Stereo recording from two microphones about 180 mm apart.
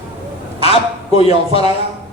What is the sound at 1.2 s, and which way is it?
Speech, 35° left (ahead or behind).